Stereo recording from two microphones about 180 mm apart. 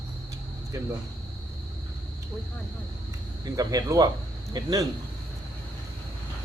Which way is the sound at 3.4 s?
20° right (ahead or behind).